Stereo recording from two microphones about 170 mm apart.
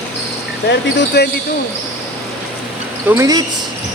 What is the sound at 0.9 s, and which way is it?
Speech, 80° left.